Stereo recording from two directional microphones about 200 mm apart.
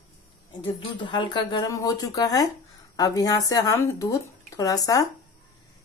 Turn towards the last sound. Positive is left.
turn(degrees=15)  # may be behind; listen again after turning